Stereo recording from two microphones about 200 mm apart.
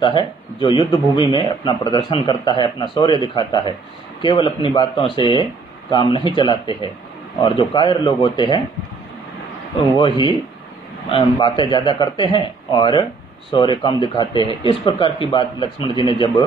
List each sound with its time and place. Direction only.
0.0 s speech: 25° left (ahead or behind)
9.9 s speech: 25° left (ahead or behind)